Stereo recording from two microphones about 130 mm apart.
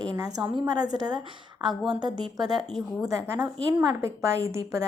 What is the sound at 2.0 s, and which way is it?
A woman's voice, 30° right (ahead or behind).